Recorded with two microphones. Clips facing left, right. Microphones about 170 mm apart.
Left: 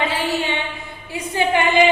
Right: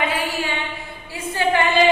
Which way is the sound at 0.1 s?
25° left (ahead or behind).